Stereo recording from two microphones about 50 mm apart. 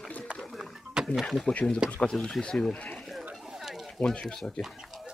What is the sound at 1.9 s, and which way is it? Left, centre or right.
Speech, centre.